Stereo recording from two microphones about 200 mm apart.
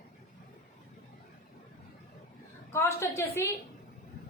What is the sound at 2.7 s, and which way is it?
Speech, 15° left (ahead or behind).